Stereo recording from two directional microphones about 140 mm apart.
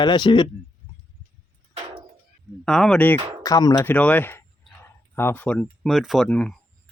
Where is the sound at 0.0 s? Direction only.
35° left (ahead or behind).